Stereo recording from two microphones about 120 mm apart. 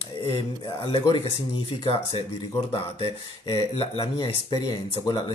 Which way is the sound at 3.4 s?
45° left (ahead or behind).